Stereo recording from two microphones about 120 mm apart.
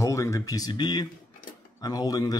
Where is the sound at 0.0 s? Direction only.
25° left (ahead or behind).